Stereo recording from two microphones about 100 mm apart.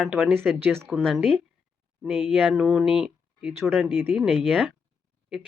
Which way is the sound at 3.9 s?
20° right (ahead or behind).